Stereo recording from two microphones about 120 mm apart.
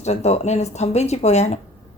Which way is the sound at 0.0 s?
65° left (ahead or behind).